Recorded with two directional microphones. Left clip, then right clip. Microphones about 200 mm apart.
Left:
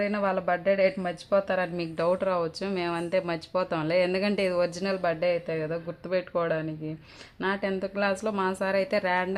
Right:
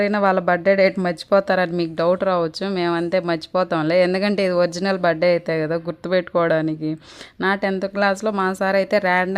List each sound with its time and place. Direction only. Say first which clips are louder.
0.0 s speech: right 9 dB; 40° right (ahead or behind)